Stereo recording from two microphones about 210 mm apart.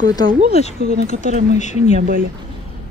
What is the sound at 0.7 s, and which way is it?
Speech, 45° right (ahead or behind).